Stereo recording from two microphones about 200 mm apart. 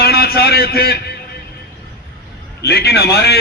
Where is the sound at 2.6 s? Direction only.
55° left (ahead or behind).